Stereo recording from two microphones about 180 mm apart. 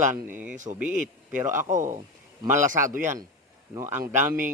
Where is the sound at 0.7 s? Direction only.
25° right (ahead or behind).